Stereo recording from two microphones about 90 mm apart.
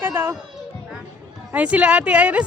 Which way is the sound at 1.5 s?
15° right (ahead or behind).